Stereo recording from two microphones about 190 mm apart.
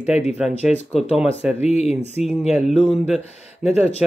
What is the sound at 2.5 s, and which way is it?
Speech, 5° right (ahead or behind).